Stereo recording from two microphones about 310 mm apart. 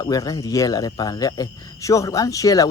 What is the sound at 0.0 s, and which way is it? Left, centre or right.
Speech, centre.